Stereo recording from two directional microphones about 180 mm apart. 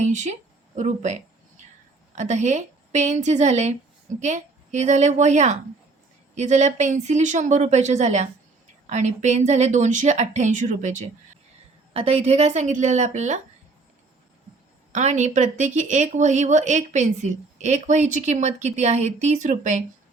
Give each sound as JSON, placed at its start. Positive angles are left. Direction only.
{"t": 0.0, "sound": "speech", "side_deg": -40}
{"t": 14.9, "sound": "speech", "side_deg": -40}